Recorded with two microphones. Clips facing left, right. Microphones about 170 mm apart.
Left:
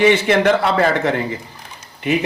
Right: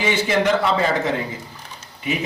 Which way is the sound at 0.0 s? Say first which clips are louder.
Left 6 dB; 65° left (ahead or behind).